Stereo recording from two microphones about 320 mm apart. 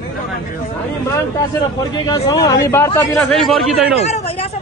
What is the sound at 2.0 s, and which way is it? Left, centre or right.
Speech, centre.